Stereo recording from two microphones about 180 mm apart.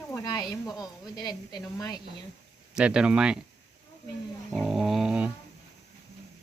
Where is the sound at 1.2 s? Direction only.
20° left (ahead or behind).